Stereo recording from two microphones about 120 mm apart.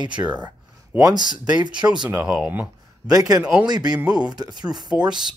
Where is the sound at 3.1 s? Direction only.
30° right (ahead or behind).